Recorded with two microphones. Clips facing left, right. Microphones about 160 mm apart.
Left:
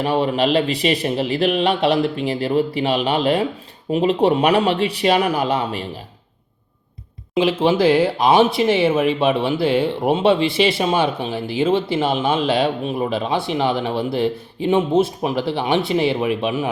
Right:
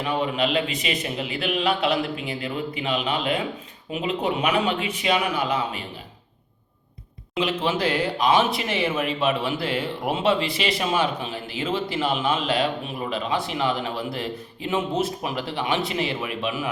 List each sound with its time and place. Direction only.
0.0 s speech: 35° left (ahead or behind)
7.3 s speech: 30° left (ahead or behind)